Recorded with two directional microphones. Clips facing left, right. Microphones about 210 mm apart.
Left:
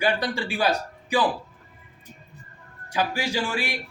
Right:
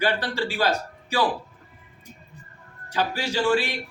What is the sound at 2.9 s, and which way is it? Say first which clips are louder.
Speech: even; 10° left (ahead or behind).